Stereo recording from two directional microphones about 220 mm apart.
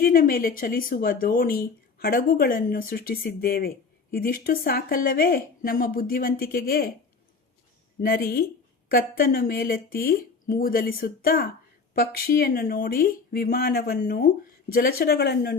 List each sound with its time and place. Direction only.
0.0 s speech: 40° left (ahead or behind)
8.0 s speech: 45° left (ahead or behind)